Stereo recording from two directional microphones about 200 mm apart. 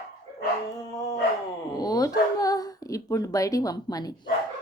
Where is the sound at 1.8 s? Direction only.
20° left (ahead or behind).